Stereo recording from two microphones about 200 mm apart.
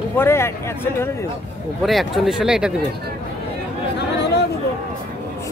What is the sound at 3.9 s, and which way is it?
Chatter, 55° left (ahead or behind).